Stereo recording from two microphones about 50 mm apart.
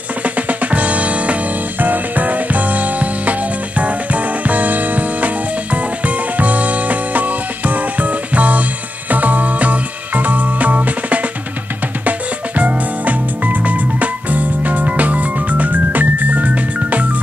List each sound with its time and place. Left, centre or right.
0.2 s music: right